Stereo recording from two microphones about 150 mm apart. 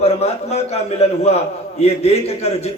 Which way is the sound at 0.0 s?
45° left (ahead or behind).